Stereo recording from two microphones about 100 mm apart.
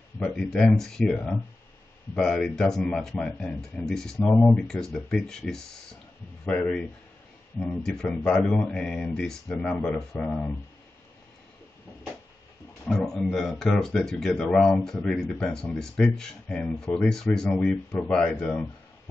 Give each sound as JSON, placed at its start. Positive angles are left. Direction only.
{"t": 0.2, "sound": "speech", "side_deg": 10}
{"t": 13.1, "sound": "speech", "side_deg": 5}